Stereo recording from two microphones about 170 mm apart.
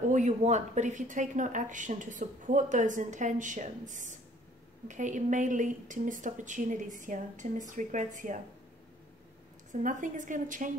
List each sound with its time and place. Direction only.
0.1 s speech: 45° right (ahead or behind)
9.7 s speech: 50° right (ahead or behind)